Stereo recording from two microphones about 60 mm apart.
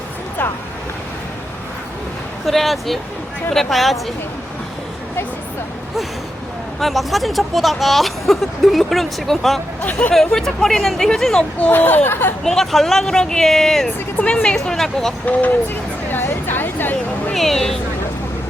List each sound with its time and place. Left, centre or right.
2.5 s speech: centre
6.7 s speech: centre
11.6 s speech: left
12.5 s speech: centre
14.2 s speech: centre
15.3 s speech: left
16.1 s a sound: left
17.3 s speech: centre